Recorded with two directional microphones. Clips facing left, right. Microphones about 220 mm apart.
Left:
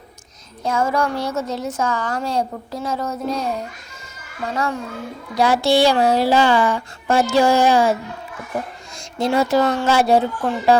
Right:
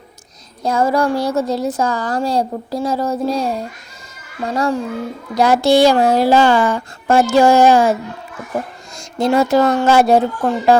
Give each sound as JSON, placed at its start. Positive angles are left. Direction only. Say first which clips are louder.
{"t": 0.6, "sound": "a woman's voice", "louder": "right 4 dB", "side_deg": -35}
{"t": 4.5, "sound": "a woman's voice", "louder": "right 6 dB", "side_deg": -35}
{"t": 9.0, "sound": "speech", "louder": "right 4 dB", "side_deg": -45}